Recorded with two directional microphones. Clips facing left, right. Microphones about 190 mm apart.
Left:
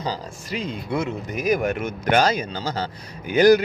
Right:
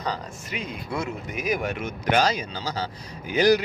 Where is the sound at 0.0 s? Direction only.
30° left (ahead or behind).